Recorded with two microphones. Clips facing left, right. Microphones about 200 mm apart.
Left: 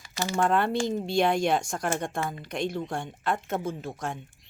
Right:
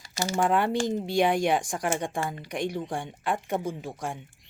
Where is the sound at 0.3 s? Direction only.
10° right (ahead or behind).